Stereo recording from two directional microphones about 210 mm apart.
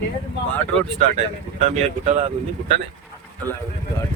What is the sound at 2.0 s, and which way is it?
Speech, 30° right (ahead or behind).